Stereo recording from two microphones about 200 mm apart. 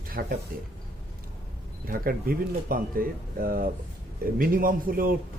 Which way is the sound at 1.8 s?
45° right (ahead or behind).